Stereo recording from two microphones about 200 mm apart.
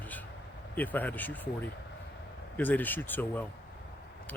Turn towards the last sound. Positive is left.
turn(degrees=10)  # may be behind; listen again after turning